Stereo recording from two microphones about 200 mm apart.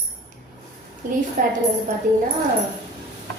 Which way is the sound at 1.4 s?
40° right (ahead or behind).